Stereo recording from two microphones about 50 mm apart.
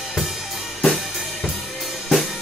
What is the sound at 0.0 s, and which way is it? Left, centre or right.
Drum kit, centre.